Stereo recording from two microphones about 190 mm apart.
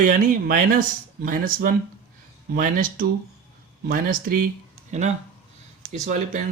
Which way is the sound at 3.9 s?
50° right (ahead or behind).